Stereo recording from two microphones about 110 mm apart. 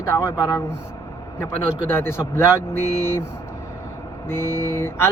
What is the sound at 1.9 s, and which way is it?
Speech, 20° left (ahead or behind).